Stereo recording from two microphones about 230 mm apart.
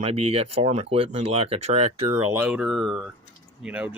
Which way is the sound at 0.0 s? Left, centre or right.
Right.